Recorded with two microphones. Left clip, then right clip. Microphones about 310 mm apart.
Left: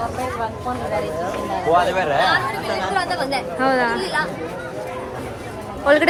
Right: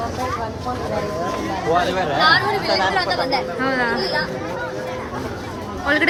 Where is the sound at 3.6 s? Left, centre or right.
Centre.